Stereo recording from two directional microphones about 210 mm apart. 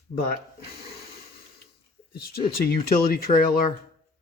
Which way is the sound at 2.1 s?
45° left (ahead or behind).